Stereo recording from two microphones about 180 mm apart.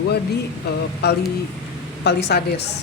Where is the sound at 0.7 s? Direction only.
65° left (ahead or behind).